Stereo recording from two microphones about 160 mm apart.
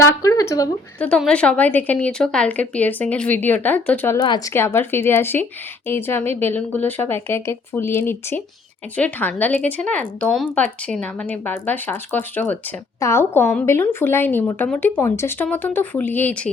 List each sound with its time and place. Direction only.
0.0 s speech: 20° left (ahead or behind)
0.9 s speech: 5° left (ahead or behind)